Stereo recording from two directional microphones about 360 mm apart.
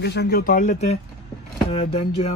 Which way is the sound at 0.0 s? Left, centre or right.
Left.